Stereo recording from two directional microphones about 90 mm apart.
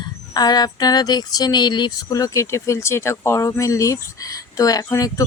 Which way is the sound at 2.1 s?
35° left (ahead or behind).